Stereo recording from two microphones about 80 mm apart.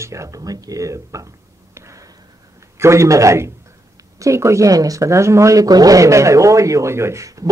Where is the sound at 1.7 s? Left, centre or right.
Right.